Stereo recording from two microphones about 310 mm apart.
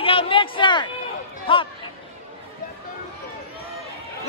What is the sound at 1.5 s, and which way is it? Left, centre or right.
Chatter, centre.